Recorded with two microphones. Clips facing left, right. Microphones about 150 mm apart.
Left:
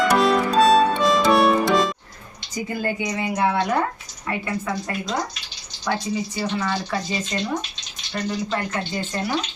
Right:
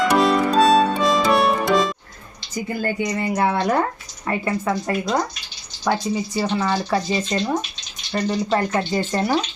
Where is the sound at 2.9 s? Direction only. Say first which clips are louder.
Right 3 dB; 50° right (ahead or behind).